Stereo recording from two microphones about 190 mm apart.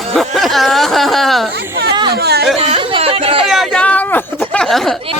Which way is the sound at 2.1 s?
55° right (ahead or behind).